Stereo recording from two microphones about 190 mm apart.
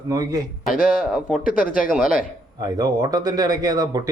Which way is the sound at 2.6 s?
20° right (ahead or behind).